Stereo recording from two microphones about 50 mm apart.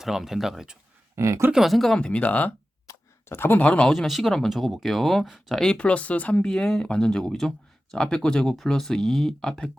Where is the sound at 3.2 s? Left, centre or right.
Left.